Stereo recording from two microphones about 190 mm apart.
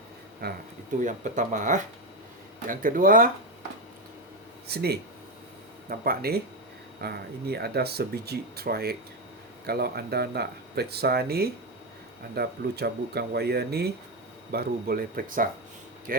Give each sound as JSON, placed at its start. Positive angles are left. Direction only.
{"t": 0.4, "sound": "speech", "side_deg": -55}
{"t": 1.0, "sound": "speech", "side_deg": -40}
{"t": 4.7, "sound": "speech", "side_deg": -55}